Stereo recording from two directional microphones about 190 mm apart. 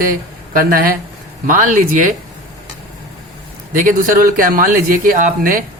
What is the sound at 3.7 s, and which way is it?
A man's voice, 45° right (ahead or behind).